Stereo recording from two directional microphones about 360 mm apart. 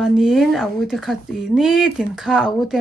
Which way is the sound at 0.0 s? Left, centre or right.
Centre.